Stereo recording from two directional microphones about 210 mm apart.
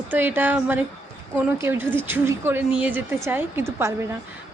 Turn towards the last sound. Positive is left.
turn(degrees=-10)  # may be behind; listen again after turning